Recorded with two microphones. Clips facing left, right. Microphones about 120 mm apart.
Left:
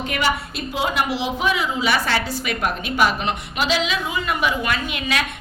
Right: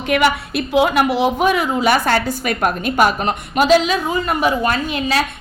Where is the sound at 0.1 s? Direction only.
65° right (ahead or behind).